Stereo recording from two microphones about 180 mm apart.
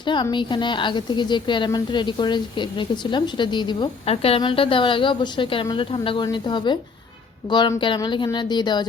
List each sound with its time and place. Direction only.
0.0 s a woman's voice: 25° left (ahead or behind)